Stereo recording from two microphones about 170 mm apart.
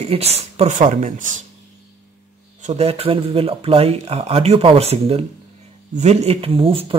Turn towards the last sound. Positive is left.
turn(degrees=-30)  # may be behind; listen again after turning